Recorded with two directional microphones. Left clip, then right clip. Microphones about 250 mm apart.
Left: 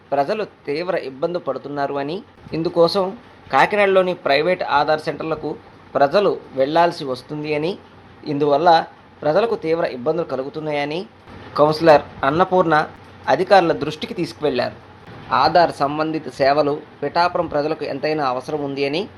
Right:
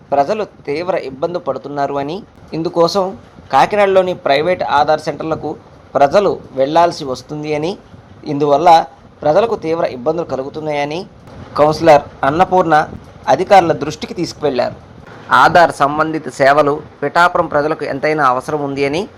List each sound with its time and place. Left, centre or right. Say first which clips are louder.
0.1 s speech: right 5 dB; centre